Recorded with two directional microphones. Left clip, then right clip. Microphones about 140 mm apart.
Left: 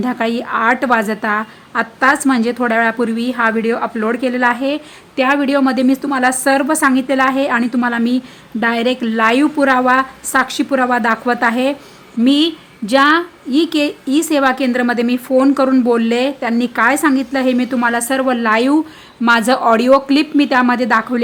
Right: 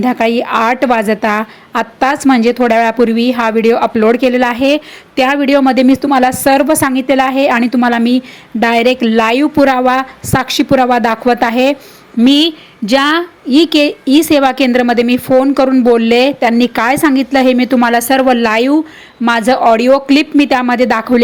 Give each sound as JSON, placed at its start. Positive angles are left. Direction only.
{"t": 0.0, "sound": "a woman's voice", "side_deg": -20}
{"t": 19.2, "sound": "a woman's voice", "side_deg": -15}